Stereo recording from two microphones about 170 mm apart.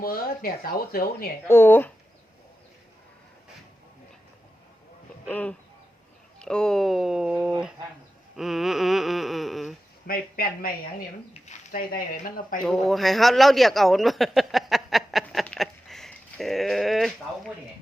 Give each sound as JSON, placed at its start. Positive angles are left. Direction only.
{"t": 0.0, "sound": "speech", "side_deg": 60}
{"t": 1.5, "sound": "speech", "side_deg": 15}
{"t": 5.3, "sound": "speech", "side_deg": 10}
{"t": 8.4, "sound": "a sound", "side_deg": 0}
{"t": 10.1, "sound": "speech", "side_deg": 60}
{"t": 11.4, "sound": "speech", "side_deg": 50}
{"t": 12.6, "sound": "a sound", "side_deg": 0}